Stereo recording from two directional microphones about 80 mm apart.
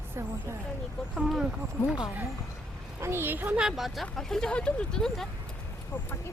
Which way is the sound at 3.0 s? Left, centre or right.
Right.